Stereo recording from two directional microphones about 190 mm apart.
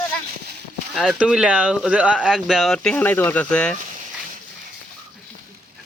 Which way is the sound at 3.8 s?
40° right (ahead or behind).